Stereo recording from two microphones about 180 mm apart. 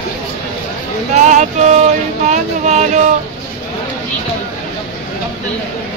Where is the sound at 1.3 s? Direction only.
40° right (ahead or behind).